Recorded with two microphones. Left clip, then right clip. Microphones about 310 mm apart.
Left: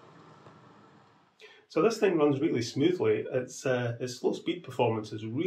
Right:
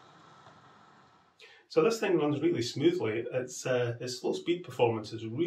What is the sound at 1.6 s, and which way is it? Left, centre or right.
Speech, centre.